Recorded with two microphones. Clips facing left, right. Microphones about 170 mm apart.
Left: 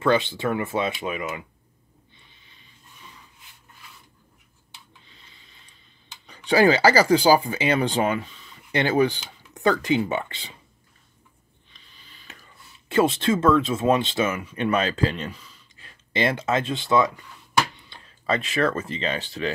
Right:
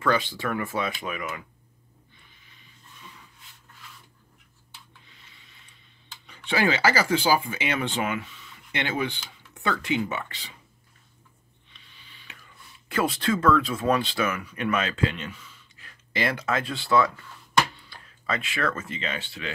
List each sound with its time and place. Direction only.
0.0 s speech: 25° left (ahead or behind)
5.2 s a sound: 30° left (ahead or behind)
6.2 s speech: 35° left (ahead or behind)
11.7 s a sound: 40° left (ahead or behind)
12.8 s speech: 25° left (ahead or behind)
17.8 s speech: 30° left (ahead or behind)